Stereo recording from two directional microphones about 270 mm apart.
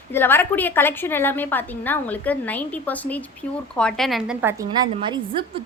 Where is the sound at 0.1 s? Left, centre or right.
Centre.